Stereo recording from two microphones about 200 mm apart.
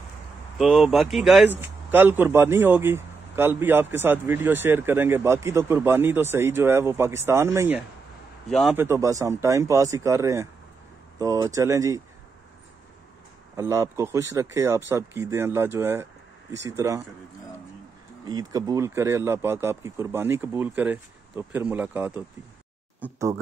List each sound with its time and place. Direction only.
0.6 s a man's voice: centre (ahead or behind)
8.5 s a man's voice: centre (ahead or behind)
8.7 s a man's voice: 15° right (ahead or behind)
13.6 s a man's voice: 15° right (ahead or behind)
18.2 s a man's voice: 20° right (ahead or behind)